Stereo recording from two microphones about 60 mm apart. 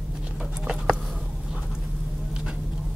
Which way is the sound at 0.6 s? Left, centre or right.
Centre.